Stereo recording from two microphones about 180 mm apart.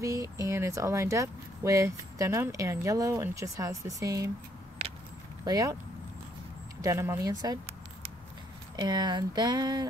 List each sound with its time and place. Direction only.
0.0 s speech: 20° right (ahead or behind)
5.4 s speech: 20° right (ahead or behind)
6.8 s speech: 15° right (ahead or behind)
8.7 s speech: 25° right (ahead or behind)